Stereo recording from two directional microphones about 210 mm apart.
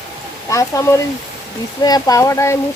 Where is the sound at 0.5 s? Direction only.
15° left (ahead or behind).